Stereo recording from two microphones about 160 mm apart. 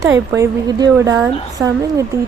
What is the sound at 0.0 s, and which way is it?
Speech, 20° right (ahead or behind).